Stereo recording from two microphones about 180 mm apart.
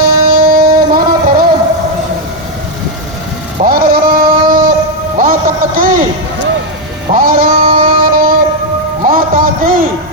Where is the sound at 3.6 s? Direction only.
55° right (ahead or behind).